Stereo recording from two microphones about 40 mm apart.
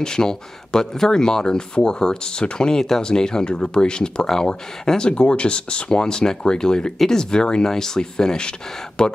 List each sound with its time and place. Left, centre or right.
0.0 s speech: centre